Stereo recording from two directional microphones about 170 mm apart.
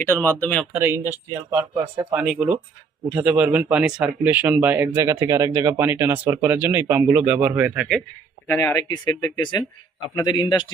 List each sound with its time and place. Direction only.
0.0 s speech: 10° left (ahead or behind)
0.7 s speech: 15° right (ahead or behind)
1.7 s speech: 20° right (ahead or behind)
2.1 s speech: 5° right (ahead or behind)
8.4 s speech: 20° left (ahead or behind)